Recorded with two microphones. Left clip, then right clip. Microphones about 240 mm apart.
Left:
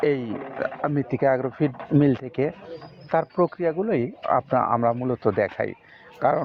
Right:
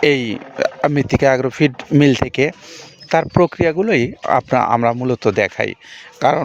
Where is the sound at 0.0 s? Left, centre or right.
Right.